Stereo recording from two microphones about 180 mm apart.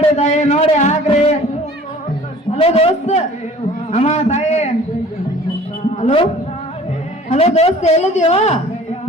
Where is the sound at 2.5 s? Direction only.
35° left (ahead or behind).